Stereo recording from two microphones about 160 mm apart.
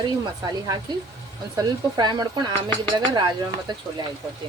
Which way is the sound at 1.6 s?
25° right (ahead or behind).